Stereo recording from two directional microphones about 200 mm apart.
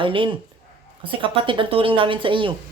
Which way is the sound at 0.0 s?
25° right (ahead or behind).